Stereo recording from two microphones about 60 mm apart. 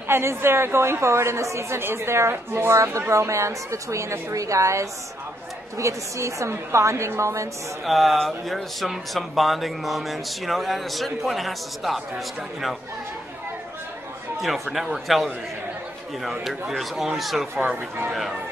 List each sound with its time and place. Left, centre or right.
0.1 s a woman's voice: right
7.8 s speech: centre
14.4 s speech: centre